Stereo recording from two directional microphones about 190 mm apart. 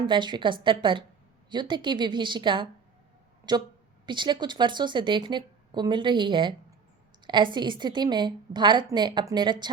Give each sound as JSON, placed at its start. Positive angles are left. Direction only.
{"t": 0.0, "sound": "a woman's voice", "side_deg": -25}